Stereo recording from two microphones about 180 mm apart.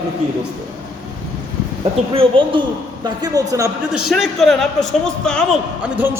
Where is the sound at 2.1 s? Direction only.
30° right (ahead or behind).